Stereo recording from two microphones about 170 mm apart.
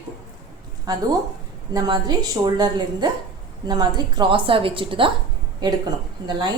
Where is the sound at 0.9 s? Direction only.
20° right (ahead or behind).